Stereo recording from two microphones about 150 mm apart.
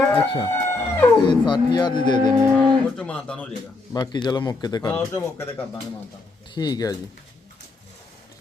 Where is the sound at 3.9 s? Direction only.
25° left (ahead or behind).